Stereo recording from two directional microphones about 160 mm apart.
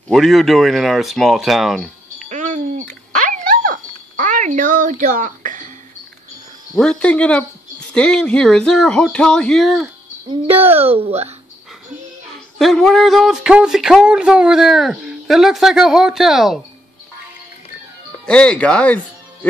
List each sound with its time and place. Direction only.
0.1 s speech: centre (ahead or behind)
2.2 s a sound: 50° right (ahead or behind)
6.8 s speech: 5° left (ahead or behind)
10.3 s speech: 35° right (ahead or behind)
12.5 s speech: centre (ahead or behind)
18.2 s speech: 5° left (ahead or behind)